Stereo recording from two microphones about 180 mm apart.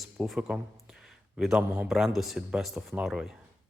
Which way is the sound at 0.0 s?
5° right (ahead or behind).